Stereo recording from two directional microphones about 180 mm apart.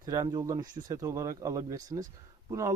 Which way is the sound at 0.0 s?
20° right (ahead or behind).